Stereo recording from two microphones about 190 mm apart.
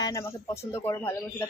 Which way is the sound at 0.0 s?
15° left (ahead or behind).